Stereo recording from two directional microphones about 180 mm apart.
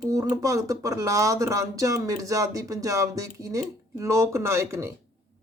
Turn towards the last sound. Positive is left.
turn(degrees=-15)  # may be behind; listen again after turning